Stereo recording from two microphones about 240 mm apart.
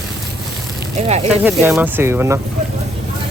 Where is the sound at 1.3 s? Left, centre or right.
Centre.